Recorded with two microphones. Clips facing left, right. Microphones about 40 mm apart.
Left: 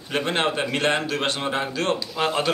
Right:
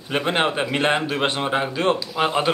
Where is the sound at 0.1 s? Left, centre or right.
Centre.